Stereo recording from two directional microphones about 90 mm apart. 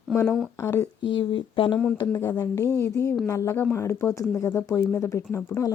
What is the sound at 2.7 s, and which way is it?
A woman's voice, 30° left (ahead or behind).